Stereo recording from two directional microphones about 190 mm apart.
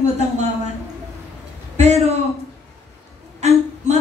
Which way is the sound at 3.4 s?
35° right (ahead or behind).